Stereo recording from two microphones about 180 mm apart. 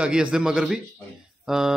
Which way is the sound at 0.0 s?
5° right (ahead or behind).